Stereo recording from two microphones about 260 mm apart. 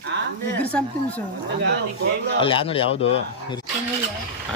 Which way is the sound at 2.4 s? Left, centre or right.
Left.